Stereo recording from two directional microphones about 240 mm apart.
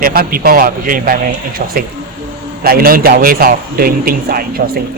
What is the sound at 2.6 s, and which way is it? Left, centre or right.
A man's voice, right.